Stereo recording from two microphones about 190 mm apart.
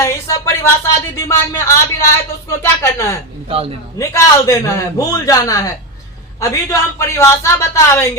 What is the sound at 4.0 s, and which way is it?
A man's voice, 15° left (ahead or behind).